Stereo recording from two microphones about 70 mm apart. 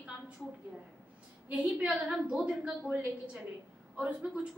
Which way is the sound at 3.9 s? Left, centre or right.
Centre.